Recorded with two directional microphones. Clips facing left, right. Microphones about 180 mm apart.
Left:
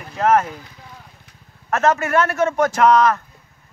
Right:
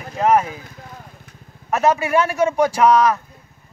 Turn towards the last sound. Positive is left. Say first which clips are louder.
# even
turn(degrees=-10)  # may be behind; listen again after turning